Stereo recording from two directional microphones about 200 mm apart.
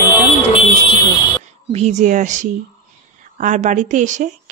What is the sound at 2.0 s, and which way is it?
A woman's voice, 40° right (ahead or behind).